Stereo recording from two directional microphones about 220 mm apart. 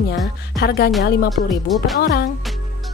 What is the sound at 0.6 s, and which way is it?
Speech, 45° left (ahead or behind).